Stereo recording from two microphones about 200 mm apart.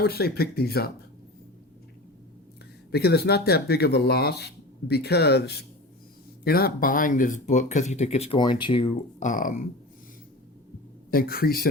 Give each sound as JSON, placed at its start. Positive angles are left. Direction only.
{"t": 0.0, "sound": "speech", "side_deg": 50}
{"t": 2.9, "sound": "speech", "side_deg": 55}
{"t": 9.2, "sound": "speech", "side_deg": 40}
{"t": 11.1, "sound": "speech", "side_deg": 45}